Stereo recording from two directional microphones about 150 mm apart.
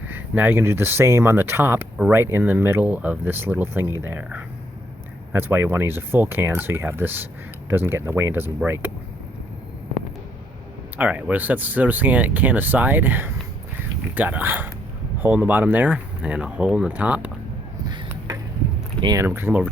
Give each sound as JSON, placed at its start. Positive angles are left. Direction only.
{"t": 0.1, "sound": "speech", "side_deg": -15}
{"t": 10.9, "sound": "speech", "side_deg": -10}
{"t": 17.8, "sound": "a sound", "side_deg": -25}
{"t": 19.0, "sound": "speech", "side_deg": -20}